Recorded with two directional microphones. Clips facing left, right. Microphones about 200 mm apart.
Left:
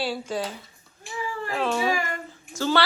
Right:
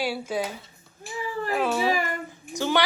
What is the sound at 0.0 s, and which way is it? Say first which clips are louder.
A woman's voice: right 1 dB; 10° right (ahead or behind).